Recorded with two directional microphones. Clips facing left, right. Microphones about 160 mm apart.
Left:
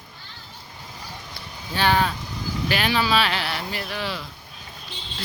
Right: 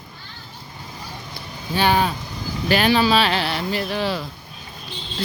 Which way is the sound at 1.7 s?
10° right (ahead or behind).